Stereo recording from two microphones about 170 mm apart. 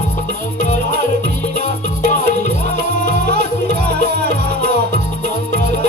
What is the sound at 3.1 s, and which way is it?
Music, 70° right (ahead or behind).